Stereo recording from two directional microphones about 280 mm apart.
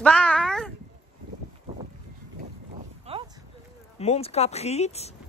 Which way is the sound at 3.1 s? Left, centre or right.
Right.